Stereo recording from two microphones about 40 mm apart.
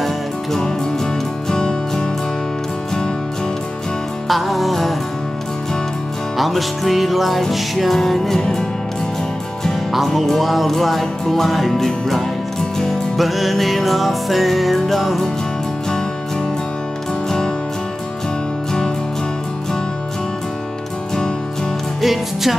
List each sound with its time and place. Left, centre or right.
0.0 s music: centre
4.3 s music: centre
6.3 s music: centre
10.0 s music: centre
22.0 s music: centre